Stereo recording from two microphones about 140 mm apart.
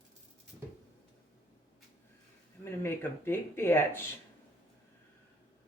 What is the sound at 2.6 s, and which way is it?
Speech, 15° left (ahead or behind).